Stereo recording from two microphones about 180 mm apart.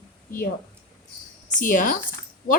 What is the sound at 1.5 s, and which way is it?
Speech, 45° left (ahead or behind).